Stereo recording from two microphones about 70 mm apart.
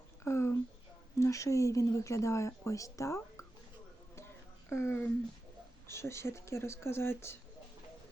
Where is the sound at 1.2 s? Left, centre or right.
Left.